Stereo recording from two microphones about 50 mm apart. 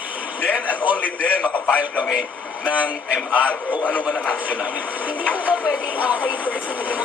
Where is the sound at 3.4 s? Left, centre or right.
Left.